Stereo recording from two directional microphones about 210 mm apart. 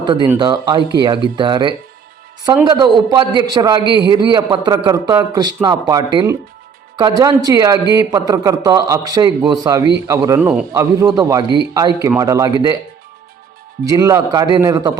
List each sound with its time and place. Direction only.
0.0 s a man's voice: 20° right (ahead or behind)
13.8 s a man's voice: 15° right (ahead or behind)